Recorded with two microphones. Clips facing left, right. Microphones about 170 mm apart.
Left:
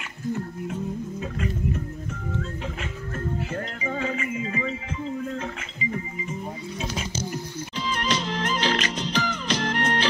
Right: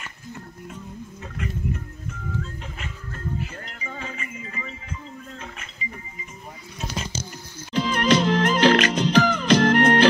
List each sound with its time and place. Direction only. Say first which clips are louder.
3.8 s music: left 7 dB; 80° left
7.7 s music: right 8 dB; 60° right (ahead or behind)